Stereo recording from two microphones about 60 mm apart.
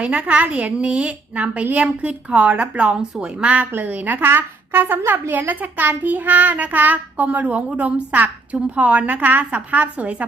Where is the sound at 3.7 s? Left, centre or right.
Right.